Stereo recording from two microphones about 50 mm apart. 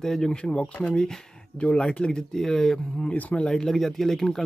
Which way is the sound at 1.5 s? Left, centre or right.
Left.